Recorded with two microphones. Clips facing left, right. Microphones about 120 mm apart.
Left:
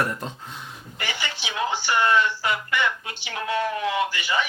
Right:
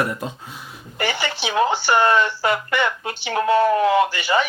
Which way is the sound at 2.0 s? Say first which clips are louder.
Right 1 dB; 45° right (ahead or behind).